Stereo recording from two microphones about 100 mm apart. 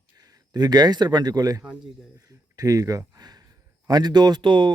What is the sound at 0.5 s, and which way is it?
A man's voice, 45° right (ahead or behind).